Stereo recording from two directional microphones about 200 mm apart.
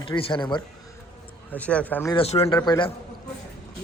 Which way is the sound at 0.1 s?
25° left (ahead or behind).